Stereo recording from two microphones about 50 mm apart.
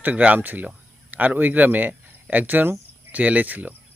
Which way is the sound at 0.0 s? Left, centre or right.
Right.